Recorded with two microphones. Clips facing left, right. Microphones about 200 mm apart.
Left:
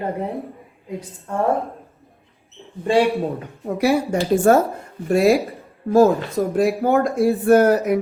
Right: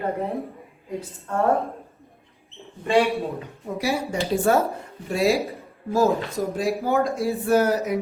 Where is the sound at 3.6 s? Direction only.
60° left (ahead or behind).